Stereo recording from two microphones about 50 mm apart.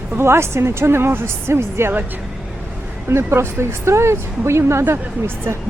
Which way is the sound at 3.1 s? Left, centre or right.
Right.